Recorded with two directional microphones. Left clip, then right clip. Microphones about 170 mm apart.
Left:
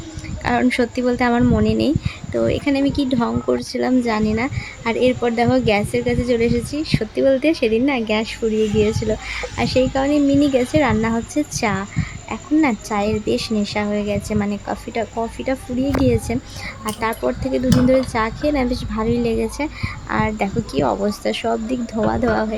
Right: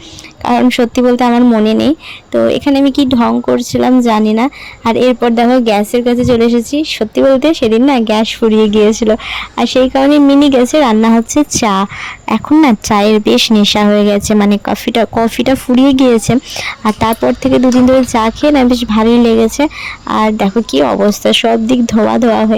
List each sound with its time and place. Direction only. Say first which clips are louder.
0.4 s speech: right 8 dB; 40° right (ahead or behind)
12.3 s speech: right 10 dB; 60° right (ahead or behind)